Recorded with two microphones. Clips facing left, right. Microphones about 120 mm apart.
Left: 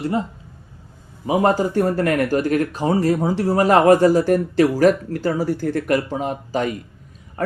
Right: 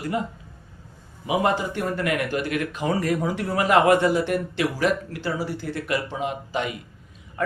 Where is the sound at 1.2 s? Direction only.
40° left (ahead or behind).